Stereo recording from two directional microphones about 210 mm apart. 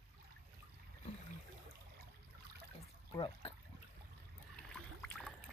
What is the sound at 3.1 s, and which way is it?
Speech, 25° left (ahead or behind).